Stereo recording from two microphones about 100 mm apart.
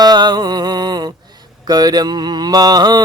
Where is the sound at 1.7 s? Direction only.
40° right (ahead or behind).